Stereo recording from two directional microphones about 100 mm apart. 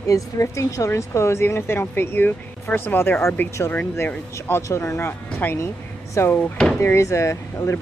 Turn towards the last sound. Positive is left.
turn(degrees=30)  # may be behind; listen again after turning